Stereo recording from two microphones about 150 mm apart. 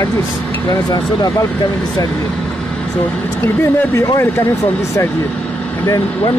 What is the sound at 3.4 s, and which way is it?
Speech, 10° left (ahead or behind).